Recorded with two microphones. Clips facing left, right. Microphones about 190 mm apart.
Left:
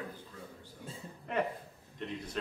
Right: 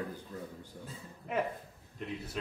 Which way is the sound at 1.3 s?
5° right (ahead or behind).